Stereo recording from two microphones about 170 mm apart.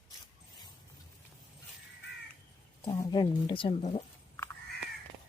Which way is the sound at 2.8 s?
25° left (ahead or behind).